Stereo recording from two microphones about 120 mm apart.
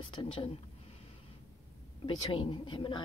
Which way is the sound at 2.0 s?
45° left (ahead or behind).